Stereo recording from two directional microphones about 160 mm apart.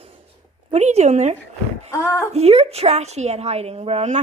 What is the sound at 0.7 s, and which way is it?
Speech, 45° right (ahead or behind).